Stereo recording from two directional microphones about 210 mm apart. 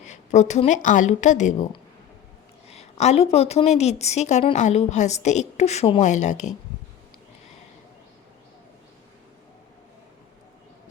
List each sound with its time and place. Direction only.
0.0 s a woman's voice: 35° left (ahead or behind)
2.6 s a woman's voice: 30° left (ahead or behind)